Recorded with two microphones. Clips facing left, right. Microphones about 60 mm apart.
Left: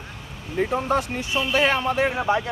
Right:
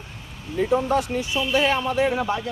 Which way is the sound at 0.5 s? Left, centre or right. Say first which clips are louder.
Right 2 dB; left.